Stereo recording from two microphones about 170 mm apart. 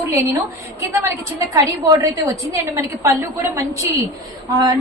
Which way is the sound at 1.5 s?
20° right (ahead or behind).